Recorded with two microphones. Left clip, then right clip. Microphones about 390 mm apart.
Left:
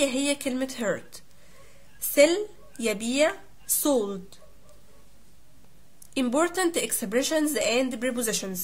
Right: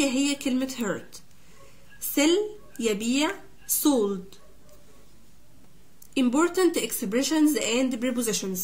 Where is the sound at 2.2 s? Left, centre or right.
Centre.